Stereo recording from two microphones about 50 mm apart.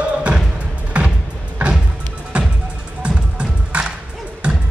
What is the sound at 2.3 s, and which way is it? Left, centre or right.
Music, right.